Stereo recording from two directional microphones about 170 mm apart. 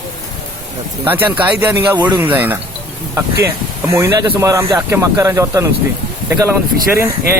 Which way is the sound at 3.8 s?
15° right (ahead or behind).